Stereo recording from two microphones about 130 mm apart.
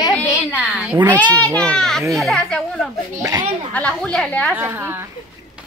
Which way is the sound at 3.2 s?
30° right (ahead or behind).